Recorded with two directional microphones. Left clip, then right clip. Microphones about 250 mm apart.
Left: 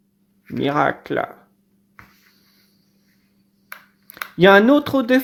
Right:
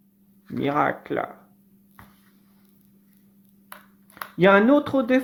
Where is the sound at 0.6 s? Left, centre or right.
Left.